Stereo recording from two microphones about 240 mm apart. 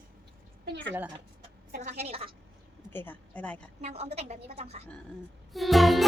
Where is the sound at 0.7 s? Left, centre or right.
Right.